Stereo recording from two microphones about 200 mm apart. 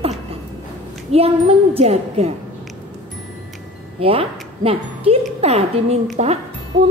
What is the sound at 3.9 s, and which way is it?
A woman's voice, 30° right (ahead or behind).